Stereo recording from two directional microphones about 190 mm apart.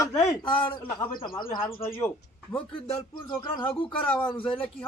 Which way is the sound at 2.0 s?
10° left (ahead or behind).